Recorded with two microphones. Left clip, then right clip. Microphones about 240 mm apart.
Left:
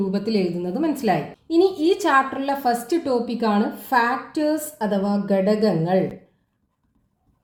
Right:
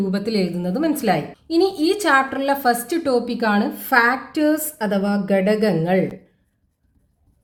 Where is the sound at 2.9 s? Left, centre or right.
Right.